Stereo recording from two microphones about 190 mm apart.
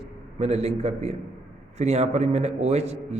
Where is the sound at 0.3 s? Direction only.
35° right (ahead or behind).